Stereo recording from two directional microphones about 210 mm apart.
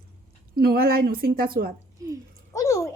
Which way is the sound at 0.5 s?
45° right (ahead or behind).